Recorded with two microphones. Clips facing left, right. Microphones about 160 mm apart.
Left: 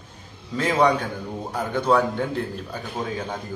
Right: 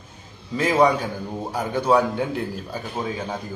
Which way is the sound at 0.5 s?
5° right (ahead or behind).